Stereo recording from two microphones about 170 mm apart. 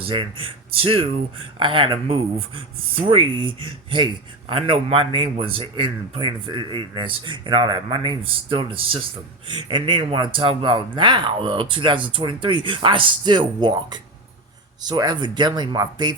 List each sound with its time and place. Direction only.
0.0 s a man's voice: 30° right (ahead or behind)